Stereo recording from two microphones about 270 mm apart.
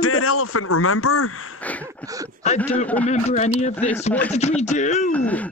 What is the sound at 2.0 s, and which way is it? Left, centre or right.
Speech, centre.